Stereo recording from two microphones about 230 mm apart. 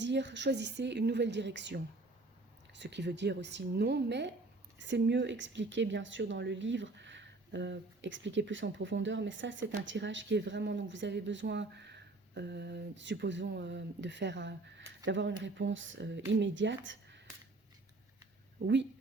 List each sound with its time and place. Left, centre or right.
0.0 s speech: right